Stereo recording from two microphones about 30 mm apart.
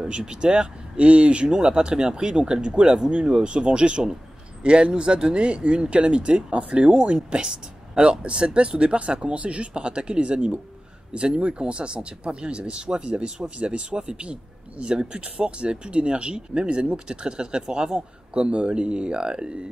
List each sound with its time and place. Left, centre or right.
0.0 s speech: right
0.9 s speech: right
1.5 s speech: right
7.4 s speech: right
18.4 s speech: right